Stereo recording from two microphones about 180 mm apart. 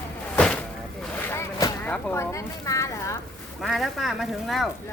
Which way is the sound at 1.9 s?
10° left (ahead or behind).